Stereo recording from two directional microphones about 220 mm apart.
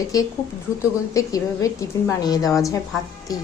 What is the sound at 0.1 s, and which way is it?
A woman's voice, 15° left (ahead or behind).